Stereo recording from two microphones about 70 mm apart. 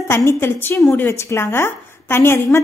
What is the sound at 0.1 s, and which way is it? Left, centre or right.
A woman's voice, left.